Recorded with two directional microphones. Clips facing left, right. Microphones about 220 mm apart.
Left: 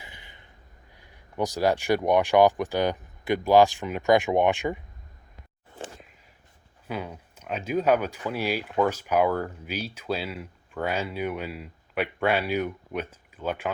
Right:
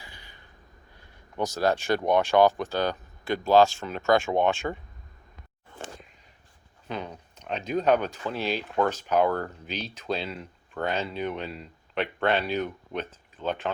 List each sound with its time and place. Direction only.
0.0 s a sound: 20° left (ahead or behind)
0.9 s speech: 15° left (ahead or behind)
6.8 s speech: 10° left (ahead or behind)